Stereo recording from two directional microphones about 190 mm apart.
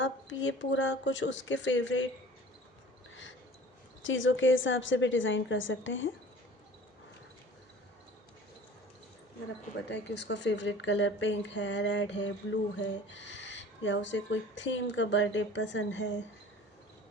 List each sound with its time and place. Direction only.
0.0 s speech: 75° left (ahead or behind)
4.0 s a woman's voice: 90° left
9.9 s speech: 65° left (ahead or behind)